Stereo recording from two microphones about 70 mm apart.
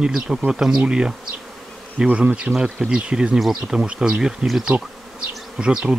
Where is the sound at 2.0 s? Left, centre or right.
Centre.